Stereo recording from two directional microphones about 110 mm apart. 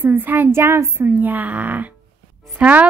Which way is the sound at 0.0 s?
15° right (ahead or behind).